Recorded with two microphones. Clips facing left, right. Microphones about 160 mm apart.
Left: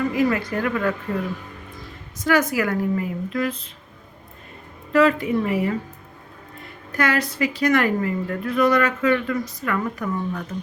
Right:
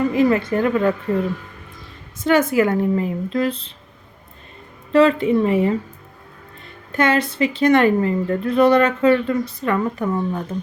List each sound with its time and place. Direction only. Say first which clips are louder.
0.1 s a woman's voice: right 4 dB; 30° right (ahead or behind)
2.2 s a woman's voice: right 4 dB; 25° right (ahead or behind)
4.9 s a woman's voice: right 3 dB; 30° right (ahead or behind)
6.9 s a woman's voice: right 4 dB; 25° right (ahead or behind)